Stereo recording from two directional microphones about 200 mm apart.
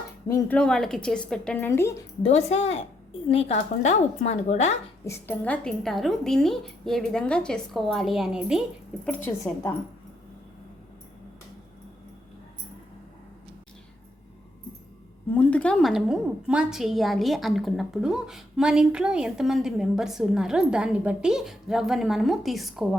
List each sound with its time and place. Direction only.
0.3 s a woman's voice: 10° left (ahead or behind)
2.2 s speech: 30° left (ahead or behind)
5.0 s a woman's voice: 10° left (ahead or behind); by 8.6 s 5° right (ahead or behind)
9.0 s a woman's voice: 10° left (ahead or behind)
15.4 s a woman's voice: 5° left (ahead or behind)